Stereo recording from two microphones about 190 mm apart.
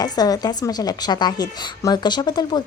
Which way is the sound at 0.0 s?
20° left (ahead or behind).